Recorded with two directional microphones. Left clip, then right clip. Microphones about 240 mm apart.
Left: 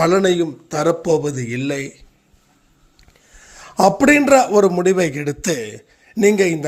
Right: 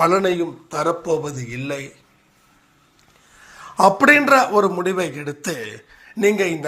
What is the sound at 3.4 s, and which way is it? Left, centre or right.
A man's voice, left.